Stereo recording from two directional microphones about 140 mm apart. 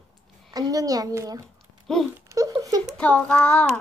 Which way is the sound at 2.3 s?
25° right (ahead or behind).